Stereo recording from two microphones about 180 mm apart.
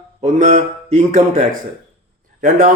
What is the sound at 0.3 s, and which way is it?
Speech, 40° right (ahead or behind).